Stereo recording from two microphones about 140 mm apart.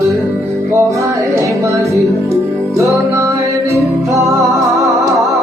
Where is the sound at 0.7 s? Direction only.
20° right (ahead or behind).